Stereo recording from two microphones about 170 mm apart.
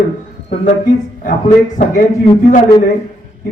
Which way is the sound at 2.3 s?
30° left (ahead or behind).